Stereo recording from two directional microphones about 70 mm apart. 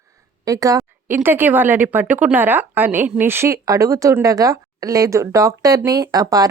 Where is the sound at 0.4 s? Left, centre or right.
Right.